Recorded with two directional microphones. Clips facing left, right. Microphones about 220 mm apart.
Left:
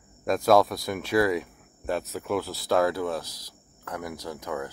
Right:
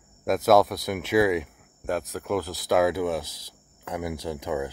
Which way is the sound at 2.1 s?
Centre (ahead or behind).